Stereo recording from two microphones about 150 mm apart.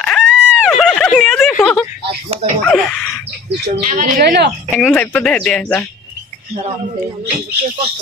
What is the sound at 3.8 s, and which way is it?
Speech, 60° right (ahead or behind).